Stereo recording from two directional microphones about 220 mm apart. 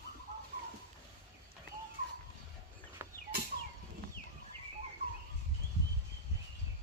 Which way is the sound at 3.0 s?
15° right (ahead or behind).